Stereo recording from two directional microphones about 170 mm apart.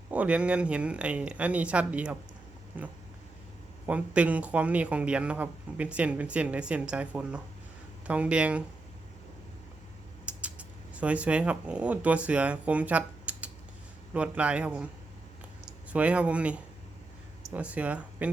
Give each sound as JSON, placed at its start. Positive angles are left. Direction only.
{"t": 0.1, "sound": "a man's voice", "side_deg": -5}
{"t": 10.2, "sound": "a man's voice", "side_deg": -5}
{"t": 15.9, "sound": "a man's voice", "side_deg": -5}